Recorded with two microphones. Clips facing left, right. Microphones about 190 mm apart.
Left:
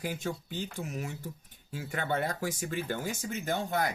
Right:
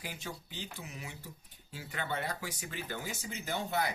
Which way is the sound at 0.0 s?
45° left (ahead or behind).